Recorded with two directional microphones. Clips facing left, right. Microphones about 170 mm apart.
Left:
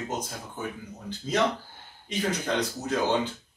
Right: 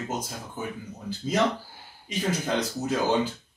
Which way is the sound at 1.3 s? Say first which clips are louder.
Right 1 dB; 10° right (ahead or behind).